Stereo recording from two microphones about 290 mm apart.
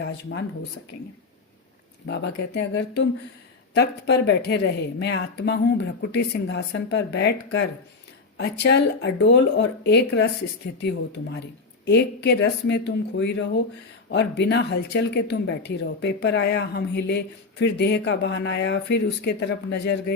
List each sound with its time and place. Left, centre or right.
0.0 s speech: left
2.0 s speech: left